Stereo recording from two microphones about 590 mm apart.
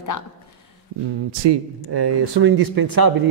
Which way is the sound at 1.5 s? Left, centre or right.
Right.